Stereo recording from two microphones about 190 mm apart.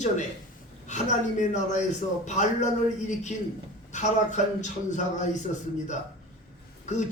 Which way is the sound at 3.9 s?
40° left (ahead or behind).